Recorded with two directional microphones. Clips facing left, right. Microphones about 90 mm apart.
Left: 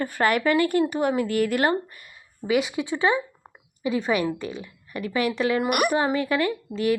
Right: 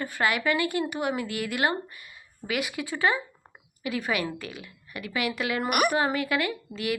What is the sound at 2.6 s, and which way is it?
A woman's voice, 20° left (ahead or behind).